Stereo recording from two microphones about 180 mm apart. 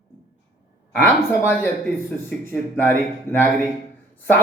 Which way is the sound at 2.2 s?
10° left (ahead or behind).